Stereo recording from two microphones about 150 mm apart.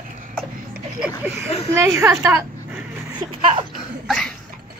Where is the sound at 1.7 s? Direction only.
20° right (ahead or behind).